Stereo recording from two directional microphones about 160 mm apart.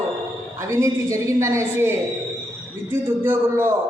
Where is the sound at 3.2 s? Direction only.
15° right (ahead or behind).